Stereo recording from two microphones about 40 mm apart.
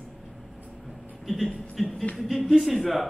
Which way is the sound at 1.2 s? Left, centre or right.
Centre.